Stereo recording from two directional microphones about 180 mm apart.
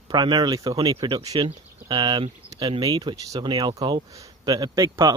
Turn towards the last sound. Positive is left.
turn(degrees=-20)  # may be behind; listen again after turning